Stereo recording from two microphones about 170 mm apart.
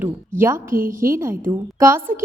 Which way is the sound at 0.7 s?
55° right (ahead or behind).